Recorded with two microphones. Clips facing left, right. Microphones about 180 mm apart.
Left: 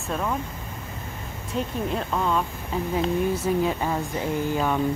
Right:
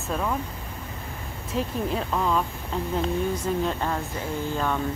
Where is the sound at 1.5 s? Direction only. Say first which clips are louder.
Even; centre (ahead or behind).